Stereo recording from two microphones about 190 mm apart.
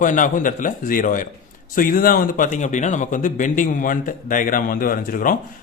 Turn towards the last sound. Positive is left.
turn(degrees=45)  # may be behind; listen again after turning